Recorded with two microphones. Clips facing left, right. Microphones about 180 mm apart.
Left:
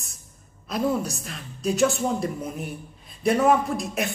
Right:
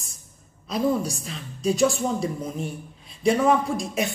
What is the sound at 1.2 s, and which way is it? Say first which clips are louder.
A man's voice: right 2 dB; centre (ahead or behind).